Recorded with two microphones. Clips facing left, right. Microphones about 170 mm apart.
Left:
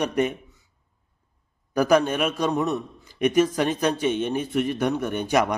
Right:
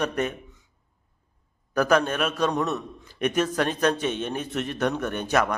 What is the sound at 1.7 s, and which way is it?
A man's voice, 10° left (ahead or behind).